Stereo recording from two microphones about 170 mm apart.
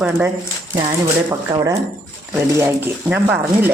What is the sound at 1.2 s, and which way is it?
Speech, 20° right (ahead or behind).